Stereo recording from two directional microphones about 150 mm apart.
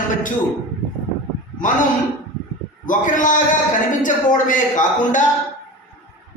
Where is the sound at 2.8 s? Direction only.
60° left (ahead or behind).